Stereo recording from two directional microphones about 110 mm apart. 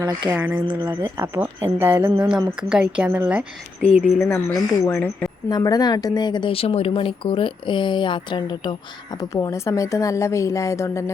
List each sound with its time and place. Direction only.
0.3 s speech: 15° right (ahead or behind)
2.6 s speech: 10° right (ahead or behind)
4.2 s speech: 20° left (ahead or behind)
5.5 s speech: 35° left (ahead or behind)
6.5 s speech: 60° left (ahead or behind); by 8.7 s 45° left (ahead or behind)
9.3 s speech: 30° left (ahead or behind)